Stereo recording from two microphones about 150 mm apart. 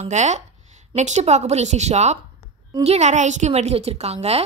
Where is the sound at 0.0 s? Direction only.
50° right (ahead or behind).